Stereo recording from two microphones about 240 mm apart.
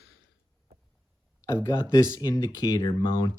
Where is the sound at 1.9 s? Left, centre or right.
Centre.